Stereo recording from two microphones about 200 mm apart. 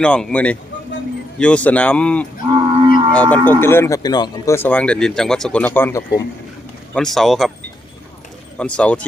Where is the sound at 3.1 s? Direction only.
5° left (ahead or behind).